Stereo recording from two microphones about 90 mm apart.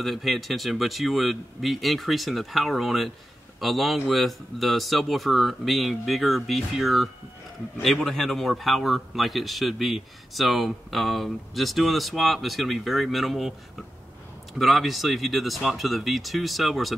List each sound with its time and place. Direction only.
0.0 s speech: centre (ahead or behind)
14.6 s speech: centre (ahead or behind)